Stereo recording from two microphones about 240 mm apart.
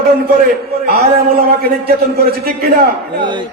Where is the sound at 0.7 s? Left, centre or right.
Right.